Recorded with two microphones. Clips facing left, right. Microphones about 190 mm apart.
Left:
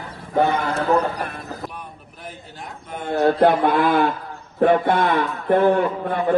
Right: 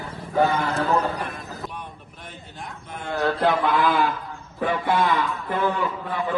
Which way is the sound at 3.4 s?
60° left (ahead or behind).